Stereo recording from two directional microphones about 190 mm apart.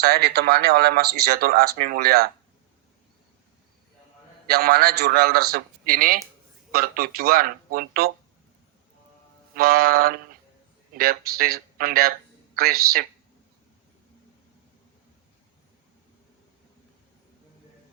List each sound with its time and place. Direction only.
0.0 s speech: 55° right (ahead or behind)
4.4 s speech: 55° right (ahead or behind)
9.6 s speech: 50° right (ahead or behind)